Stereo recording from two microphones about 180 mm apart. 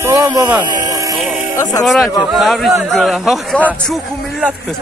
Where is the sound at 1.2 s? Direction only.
Centre (ahead or behind).